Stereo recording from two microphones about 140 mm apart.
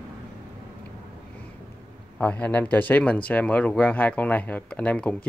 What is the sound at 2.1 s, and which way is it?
Speech, 10° left (ahead or behind).